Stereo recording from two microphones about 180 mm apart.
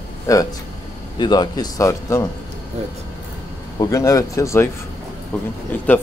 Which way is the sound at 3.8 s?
15° left (ahead or behind).